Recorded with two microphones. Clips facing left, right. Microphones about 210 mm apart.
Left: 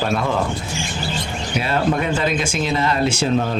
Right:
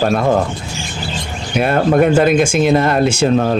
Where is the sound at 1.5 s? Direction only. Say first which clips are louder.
Right 7 dB; 55° right (ahead or behind).